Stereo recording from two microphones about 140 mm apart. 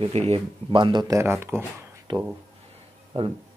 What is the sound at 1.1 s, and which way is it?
Speech, 20° right (ahead or behind).